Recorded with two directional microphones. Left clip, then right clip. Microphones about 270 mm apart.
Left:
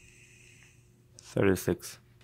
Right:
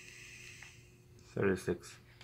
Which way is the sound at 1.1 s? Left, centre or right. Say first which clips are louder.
Left 7 dB; left.